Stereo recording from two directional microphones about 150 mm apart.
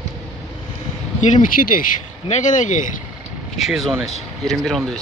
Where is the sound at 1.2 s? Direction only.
55° left (ahead or behind).